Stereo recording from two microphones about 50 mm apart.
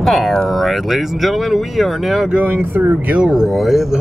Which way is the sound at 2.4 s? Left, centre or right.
Right.